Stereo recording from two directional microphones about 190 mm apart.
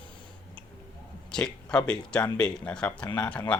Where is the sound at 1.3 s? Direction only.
5° left (ahead or behind).